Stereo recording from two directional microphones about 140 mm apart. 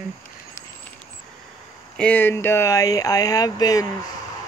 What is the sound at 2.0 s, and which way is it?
Speech, 10° left (ahead or behind).